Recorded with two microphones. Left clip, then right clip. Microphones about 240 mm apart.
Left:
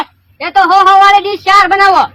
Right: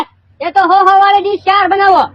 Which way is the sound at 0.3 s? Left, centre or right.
Left.